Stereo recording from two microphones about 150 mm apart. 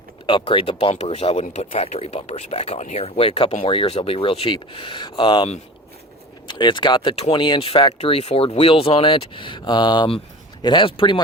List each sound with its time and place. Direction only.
0.3 s speech: 35° left (ahead or behind)